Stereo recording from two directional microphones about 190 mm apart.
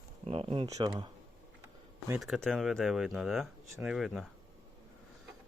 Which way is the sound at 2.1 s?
Centre (ahead or behind).